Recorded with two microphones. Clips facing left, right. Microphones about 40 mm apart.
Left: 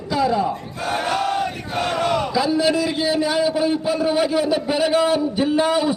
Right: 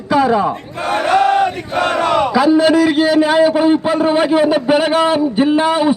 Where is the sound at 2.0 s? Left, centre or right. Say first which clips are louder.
Right 8 dB; right.